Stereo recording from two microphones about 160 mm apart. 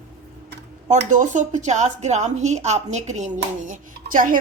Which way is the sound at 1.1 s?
50° right (ahead or behind).